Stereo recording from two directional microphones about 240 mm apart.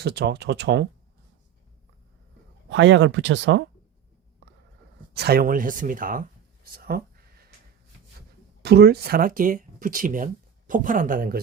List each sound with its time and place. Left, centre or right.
0.0 s speech: right
2.6 s speech: right
5.1 s speech: right
6.7 s a sound: right
8.6 s speech: right